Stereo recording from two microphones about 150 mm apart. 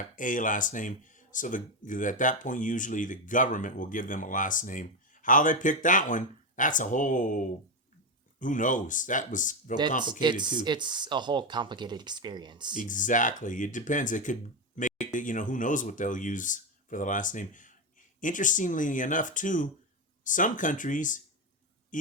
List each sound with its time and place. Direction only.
0.2 s speech: 60° left (ahead or behind)
10.0 s speech: 30° right (ahead or behind)
12.7 s speech: 60° left (ahead or behind)